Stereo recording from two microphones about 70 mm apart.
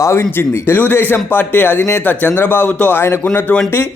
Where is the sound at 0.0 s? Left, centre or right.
Left.